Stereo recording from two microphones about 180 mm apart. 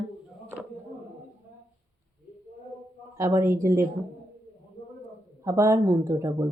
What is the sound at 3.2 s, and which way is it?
Speech, 15° right (ahead or behind).